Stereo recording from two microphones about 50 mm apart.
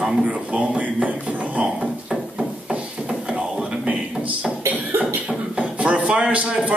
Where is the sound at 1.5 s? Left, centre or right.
Right.